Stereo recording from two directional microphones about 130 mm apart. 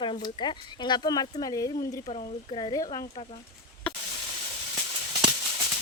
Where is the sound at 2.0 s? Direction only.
50° left (ahead or behind).